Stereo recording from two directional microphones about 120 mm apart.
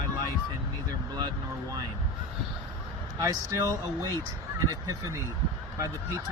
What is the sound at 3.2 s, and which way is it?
Speech, 30° right (ahead or behind).